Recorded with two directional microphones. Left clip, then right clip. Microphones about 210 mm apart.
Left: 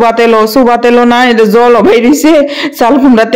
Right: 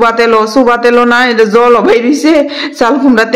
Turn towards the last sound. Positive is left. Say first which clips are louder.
# left 2 dB
turn(degrees=35)  # may be behind; listen again after turning